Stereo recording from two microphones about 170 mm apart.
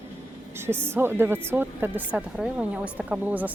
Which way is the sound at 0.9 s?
15° right (ahead or behind).